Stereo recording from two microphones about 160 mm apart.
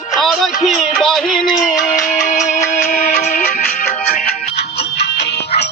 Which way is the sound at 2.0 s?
55° left (ahead or behind).